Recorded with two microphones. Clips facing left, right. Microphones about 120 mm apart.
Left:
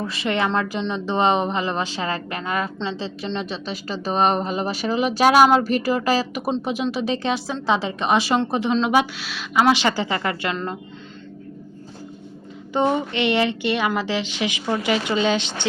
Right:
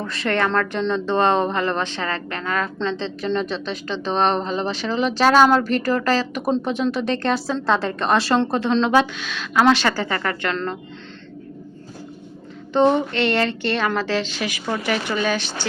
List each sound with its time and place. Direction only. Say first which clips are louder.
0.0 s a woman's voice: right 1 dB; 5° left (ahead or behind)
12.7 s a woman's voice: right 4 dB; 10° left (ahead or behind)